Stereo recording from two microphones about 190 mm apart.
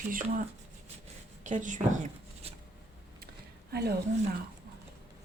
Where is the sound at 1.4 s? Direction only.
40° right (ahead or behind).